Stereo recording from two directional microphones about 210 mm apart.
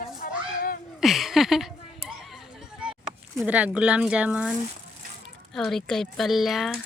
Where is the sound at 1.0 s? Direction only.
Centre (ahead or behind).